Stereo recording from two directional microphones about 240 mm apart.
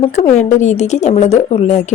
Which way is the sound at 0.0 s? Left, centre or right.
Left.